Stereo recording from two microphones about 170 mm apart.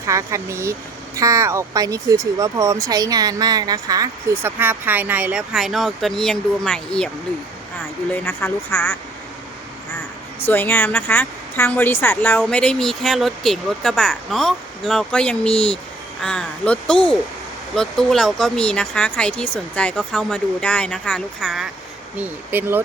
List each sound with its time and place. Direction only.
0.0 s speech: 20° right (ahead or behind); by 7.1 s 5° left (ahead or behind)
8.1 s speech: 15° left (ahead or behind)
10.4 s speech: 15° left (ahead or behind)
22.2 s speech: 10° right (ahead or behind)